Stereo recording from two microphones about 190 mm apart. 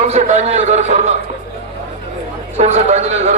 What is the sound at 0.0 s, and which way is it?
A man's voice, 40° right (ahead or behind).